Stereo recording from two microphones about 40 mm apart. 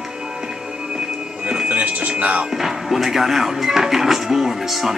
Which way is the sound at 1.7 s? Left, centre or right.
Right.